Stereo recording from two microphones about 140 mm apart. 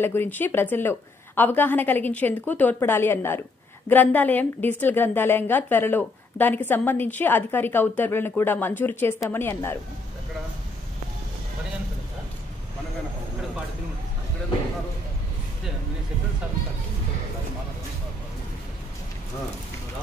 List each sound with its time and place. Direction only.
0.0 s a woman's voice: 15° left (ahead or behind)